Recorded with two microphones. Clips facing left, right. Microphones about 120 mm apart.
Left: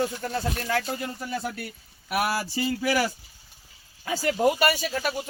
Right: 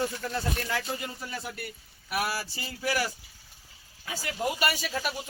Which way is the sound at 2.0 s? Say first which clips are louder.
Left 5 dB; 60° left (ahead or behind).